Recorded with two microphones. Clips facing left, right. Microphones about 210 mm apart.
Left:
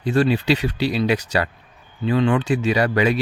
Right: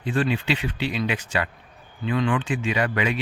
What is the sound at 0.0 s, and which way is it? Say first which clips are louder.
Speech: left 6 dB; 40° left (ahead or behind).